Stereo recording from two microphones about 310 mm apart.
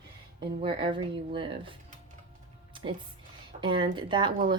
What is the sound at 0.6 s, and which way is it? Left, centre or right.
Speech, centre.